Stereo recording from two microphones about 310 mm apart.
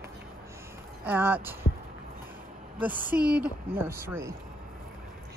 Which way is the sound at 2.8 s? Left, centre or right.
Centre.